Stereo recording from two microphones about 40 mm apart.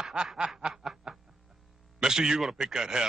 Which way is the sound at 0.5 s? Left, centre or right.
Centre.